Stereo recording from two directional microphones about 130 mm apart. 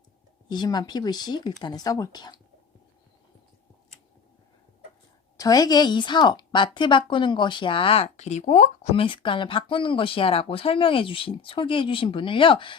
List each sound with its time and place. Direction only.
0.4 s speech: 35° left (ahead or behind)
5.4 s speech: 30° left (ahead or behind); by 8.9 s 65° left (ahead or behind)
9.0 s speech: 40° left (ahead or behind)